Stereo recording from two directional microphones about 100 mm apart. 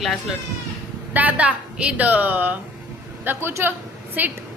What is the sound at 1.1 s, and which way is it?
A woman's voice, 15° right (ahead or behind).